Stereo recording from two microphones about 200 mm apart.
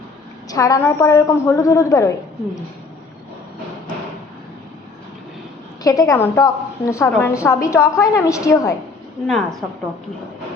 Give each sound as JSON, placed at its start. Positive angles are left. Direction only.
{"t": 0.5, "sound": "a woman's voice", "side_deg": 15}
{"t": 5.8, "sound": "a woman's voice", "side_deg": 15}
{"t": 9.2, "sound": "a woman's voice", "side_deg": 0}